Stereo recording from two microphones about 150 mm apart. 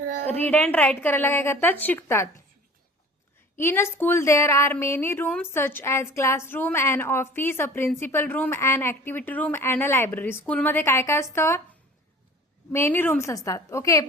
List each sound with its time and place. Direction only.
0.5 s a woman's voice: 10° left (ahead or behind)
3.6 s a woman's voice: 15° left (ahead or behind)
12.7 s a woman's voice: 15° left (ahead or behind)